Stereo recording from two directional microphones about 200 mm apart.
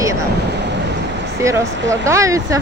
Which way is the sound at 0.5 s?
60° right (ahead or behind).